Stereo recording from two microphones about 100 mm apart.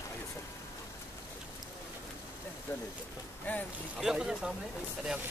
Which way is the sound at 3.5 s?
15° left (ahead or behind).